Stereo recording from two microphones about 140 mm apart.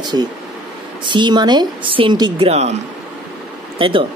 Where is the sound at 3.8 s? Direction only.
40° right (ahead or behind).